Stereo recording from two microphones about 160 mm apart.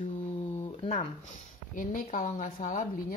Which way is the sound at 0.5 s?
40° left (ahead or behind).